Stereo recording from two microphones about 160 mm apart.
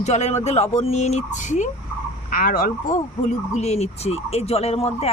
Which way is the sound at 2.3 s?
60° left (ahead or behind).